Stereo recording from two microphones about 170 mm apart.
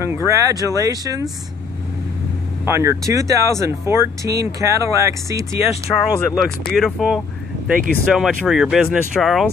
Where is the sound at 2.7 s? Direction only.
15° right (ahead or behind).